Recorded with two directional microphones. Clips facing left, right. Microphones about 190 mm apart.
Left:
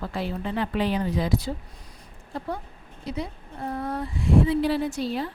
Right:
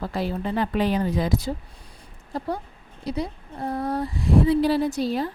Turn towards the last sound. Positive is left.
turn(degrees=-40)  # may be behind; listen again after turning